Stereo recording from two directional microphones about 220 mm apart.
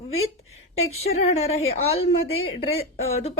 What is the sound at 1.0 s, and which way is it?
Speech, 30° left (ahead or behind).